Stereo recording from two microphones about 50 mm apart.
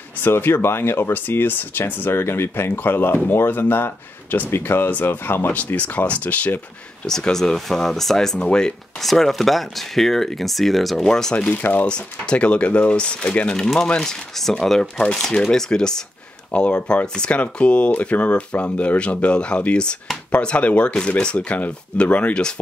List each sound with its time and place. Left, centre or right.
0.2 s speech: left
5.5 s speech: left
7.1 s speech: centre
9.0 s speech: centre
11.3 s speech: left
11.9 s speech: left
13.6 s speech: centre